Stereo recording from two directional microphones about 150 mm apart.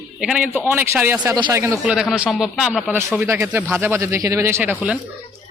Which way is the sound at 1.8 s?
5° right (ahead or behind).